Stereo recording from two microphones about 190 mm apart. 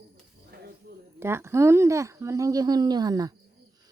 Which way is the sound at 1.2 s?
15° right (ahead or behind).